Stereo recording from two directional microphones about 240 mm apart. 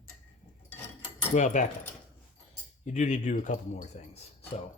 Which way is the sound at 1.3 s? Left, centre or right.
Left.